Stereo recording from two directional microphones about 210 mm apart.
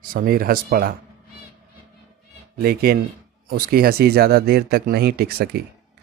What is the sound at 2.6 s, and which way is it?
Speech, 45° right (ahead or behind).